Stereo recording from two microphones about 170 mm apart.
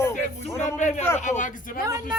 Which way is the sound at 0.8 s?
45° left (ahead or behind).